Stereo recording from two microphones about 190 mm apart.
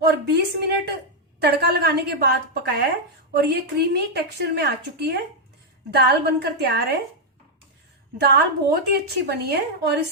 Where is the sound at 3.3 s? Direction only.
60° right (ahead or behind).